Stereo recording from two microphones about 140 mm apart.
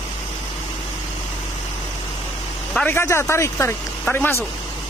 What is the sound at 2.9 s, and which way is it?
Speech, 15° left (ahead or behind).